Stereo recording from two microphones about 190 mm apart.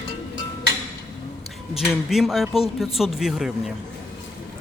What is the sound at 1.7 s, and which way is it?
Speech, centre (ahead or behind).